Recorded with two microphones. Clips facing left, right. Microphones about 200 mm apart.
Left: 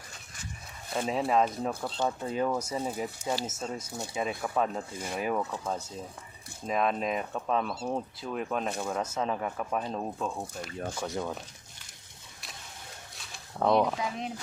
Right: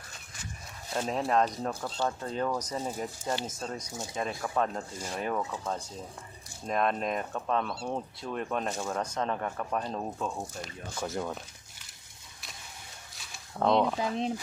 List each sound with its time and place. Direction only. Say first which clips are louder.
0.9 s speech: left 1 dB; 5° left (ahead or behind)
13.1 s a sound: even; 5° left (ahead or behind)
14.0 s speech: right 4 dB; 30° right (ahead or behind)